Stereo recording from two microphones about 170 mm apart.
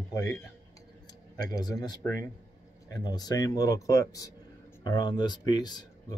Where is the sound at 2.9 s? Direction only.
25° left (ahead or behind).